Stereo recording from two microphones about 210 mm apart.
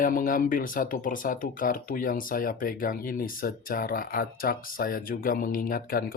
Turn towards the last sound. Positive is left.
turn(degrees=45)  # may be behind; listen again after turning